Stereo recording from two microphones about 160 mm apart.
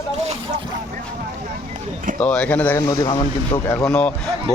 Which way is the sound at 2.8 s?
25° left (ahead or behind).